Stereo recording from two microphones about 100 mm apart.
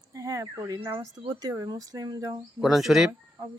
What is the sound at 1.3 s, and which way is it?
Speech, 40° right (ahead or behind).